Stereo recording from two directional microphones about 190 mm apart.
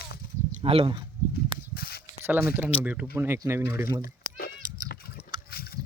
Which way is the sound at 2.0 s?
10° right (ahead or behind).